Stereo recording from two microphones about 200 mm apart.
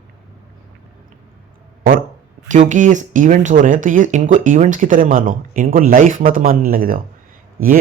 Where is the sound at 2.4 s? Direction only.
40° right (ahead or behind).